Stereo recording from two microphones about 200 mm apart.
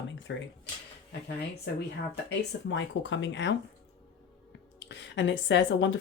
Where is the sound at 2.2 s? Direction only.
65° left (ahead or behind).